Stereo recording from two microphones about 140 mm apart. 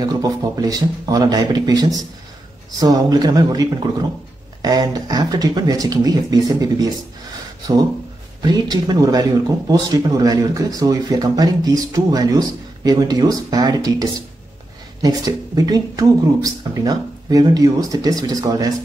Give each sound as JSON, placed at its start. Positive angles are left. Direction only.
{"t": 0.0, "sound": "speech", "side_deg": -25}
{"t": 8.4, "sound": "speech", "side_deg": -30}